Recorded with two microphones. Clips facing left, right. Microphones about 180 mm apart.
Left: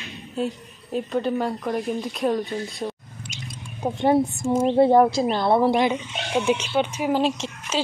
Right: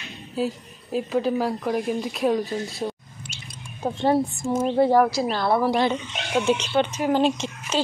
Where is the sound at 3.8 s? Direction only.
20° left (ahead or behind).